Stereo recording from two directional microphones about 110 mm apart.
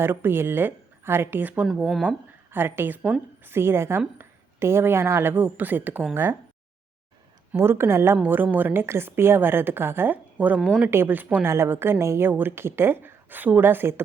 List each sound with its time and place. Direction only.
0.0 s a woman's voice: 20° right (ahead or behind)
1.9 s speech: 5° right (ahead or behind)
2.5 s a woman's voice: 20° right (ahead or behind)
7.5 s a woman's voice: 20° right (ahead or behind)
10.9 s a woman's voice: 20° right (ahead or behind)